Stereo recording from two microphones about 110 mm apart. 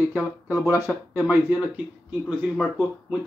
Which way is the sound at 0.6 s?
20° right (ahead or behind).